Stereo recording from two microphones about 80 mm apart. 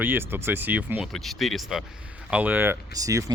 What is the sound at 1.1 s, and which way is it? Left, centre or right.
Speech, centre.